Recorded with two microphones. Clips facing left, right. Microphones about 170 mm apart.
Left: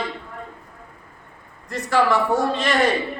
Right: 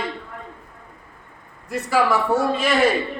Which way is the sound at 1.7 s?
10° right (ahead or behind).